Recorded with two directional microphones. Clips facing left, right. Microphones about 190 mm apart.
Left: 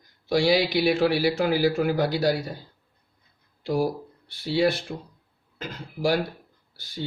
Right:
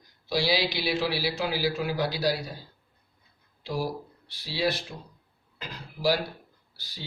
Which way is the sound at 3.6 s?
55° left (ahead or behind).